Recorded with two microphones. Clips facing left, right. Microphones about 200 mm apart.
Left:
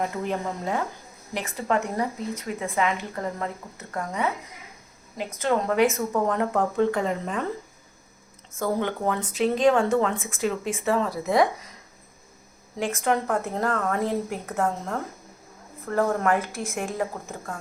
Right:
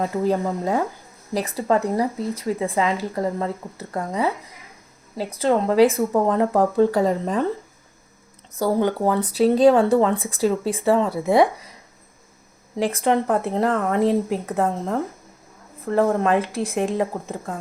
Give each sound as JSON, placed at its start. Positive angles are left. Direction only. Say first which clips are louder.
{"t": 0.0, "sound": "speech", "louder": "right 6 dB", "side_deg": -35}
{"t": 8.5, "sound": "speech", "louder": "right 6 dB", "side_deg": -35}
{"t": 12.7, "sound": "a woman's voice", "louder": "right 5 dB", "side_deg": -35}
{"t": 15.9, "sound": "a woman's voice", "louder": "right 4 dB", "side_deg": -25}
{"t": 16.6, "sound": "a woman's voice", "louder": "right 6 dB", "side_deg": -35}